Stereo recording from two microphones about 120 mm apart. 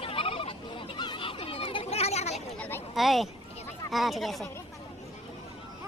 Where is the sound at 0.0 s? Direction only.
50° left (ahead or behind).